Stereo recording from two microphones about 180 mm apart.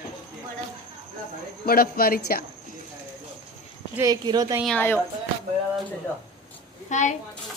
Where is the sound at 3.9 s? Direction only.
20° right (ahead or behind).